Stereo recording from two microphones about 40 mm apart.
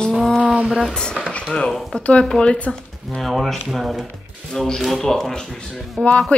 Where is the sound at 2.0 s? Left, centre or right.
Left.